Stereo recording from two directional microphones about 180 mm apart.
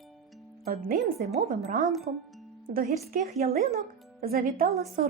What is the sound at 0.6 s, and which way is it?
Speech, 55° right (ahead or behind).